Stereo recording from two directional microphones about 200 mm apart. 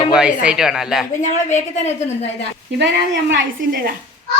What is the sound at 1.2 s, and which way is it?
Speech, 35° left (ahead or behind).